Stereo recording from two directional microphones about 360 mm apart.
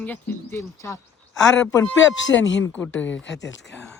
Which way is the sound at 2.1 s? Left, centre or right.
Left.